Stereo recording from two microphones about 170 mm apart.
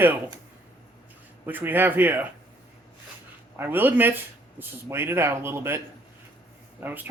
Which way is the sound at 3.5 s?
15° right (ahead or behind).